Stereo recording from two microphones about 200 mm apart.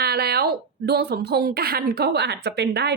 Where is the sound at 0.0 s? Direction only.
50° right (ahead or behind).